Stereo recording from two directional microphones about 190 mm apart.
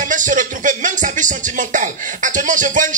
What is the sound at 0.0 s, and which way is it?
Speech, 45° right (ahead or behind).